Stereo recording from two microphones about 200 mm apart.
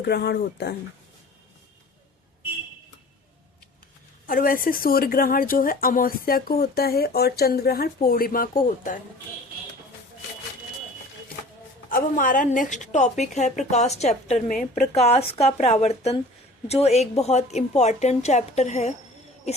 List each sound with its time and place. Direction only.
0.0 s speech: 55° left (ahead or behind)
4.3 s speech: 45° left (ahead or behind)
11.9 s a woman's voice: 45° left (ahead or behind)